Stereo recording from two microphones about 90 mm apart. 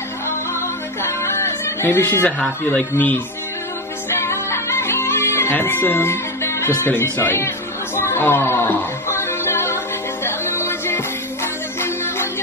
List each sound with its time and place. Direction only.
1.0 s music: 30° left (ahead or behind)
2.6 s a man's voice: 20° left (ahead or behind)
4.1 s music: 30° left (ahead or behind)